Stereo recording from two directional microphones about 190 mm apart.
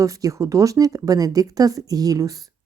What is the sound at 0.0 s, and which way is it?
Speech, 15° right (ahead or behind).